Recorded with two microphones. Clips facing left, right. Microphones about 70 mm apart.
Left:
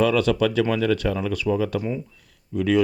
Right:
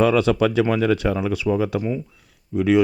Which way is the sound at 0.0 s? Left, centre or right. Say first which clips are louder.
Right 2 dB; right.